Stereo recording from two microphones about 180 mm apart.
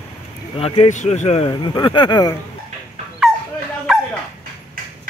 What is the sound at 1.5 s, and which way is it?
Speech, 25° left (ahead or behind).